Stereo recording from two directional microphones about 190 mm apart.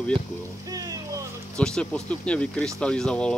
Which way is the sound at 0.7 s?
20° right (ahead or behind).